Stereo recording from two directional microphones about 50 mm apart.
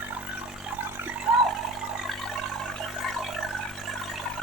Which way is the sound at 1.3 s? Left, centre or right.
Centre.